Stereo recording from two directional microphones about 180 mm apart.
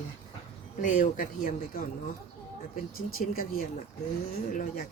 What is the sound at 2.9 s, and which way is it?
Speech, 55° left (ahead or behind).